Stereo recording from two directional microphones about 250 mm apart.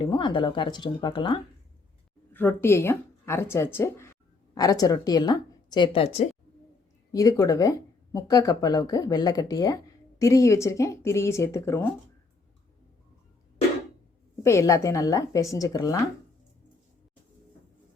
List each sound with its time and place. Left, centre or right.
0.0 s speech: centre
2.3 s speech: centre
14.4 s speech: centre